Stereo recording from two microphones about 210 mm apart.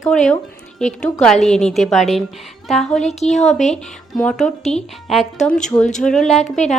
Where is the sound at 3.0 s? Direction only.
35° left (ahead or behind).